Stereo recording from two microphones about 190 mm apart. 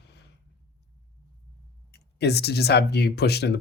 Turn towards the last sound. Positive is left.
turn(degrees=60)  # may be behind; listen again after turning